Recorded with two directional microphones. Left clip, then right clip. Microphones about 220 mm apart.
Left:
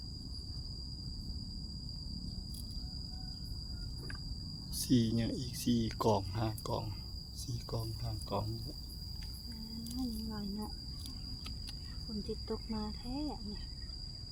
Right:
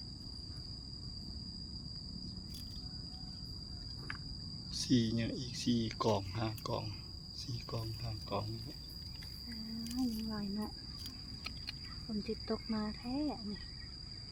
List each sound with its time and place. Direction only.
4.9 s speech: 5° left (ahead or behind)
8.3 s speech: centre (ahead or behind)
10.0 s a sound: 30° right (ahead or behind)
12.5 s speech: 25° right (ahead or behind)